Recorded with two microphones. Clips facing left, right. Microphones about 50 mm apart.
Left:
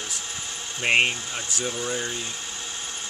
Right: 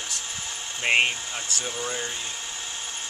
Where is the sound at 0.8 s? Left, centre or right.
Centre.